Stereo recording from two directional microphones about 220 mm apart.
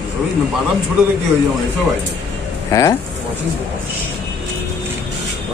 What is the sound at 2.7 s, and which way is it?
Speech, 15° left (ahead or behind).